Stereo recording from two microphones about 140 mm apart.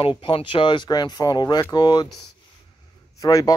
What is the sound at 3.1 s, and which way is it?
Speech, 25° left (ahead or behind).